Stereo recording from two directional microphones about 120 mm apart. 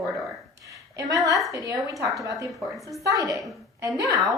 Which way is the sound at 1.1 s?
30° right (ahead or behind).